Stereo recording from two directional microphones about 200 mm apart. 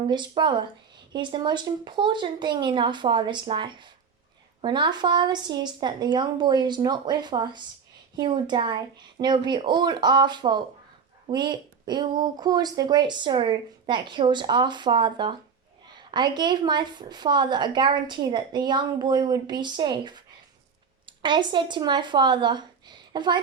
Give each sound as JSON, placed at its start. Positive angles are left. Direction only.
{"t": 0.1, "sound": "a woman's voice", "side_deg": -20}